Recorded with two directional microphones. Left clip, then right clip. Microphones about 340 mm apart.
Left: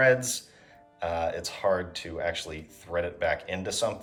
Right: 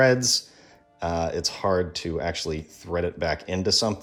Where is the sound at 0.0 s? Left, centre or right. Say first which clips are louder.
Right 3 dB; centre.